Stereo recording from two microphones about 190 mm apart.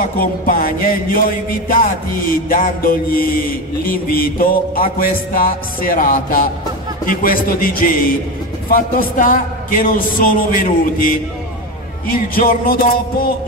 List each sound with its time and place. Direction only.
0.2 s music: 50° left (ahead or behind)